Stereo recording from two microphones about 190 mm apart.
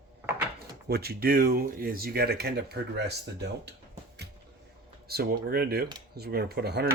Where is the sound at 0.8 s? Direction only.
55° right (ahead or behind).